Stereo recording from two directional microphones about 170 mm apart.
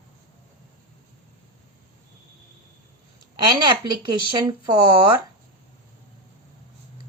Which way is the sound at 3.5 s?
25° right (ahead or behind).